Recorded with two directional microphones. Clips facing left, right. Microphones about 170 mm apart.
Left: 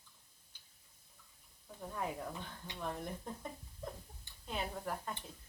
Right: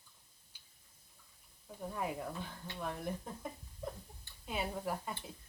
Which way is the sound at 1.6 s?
5° right (ahead or behind).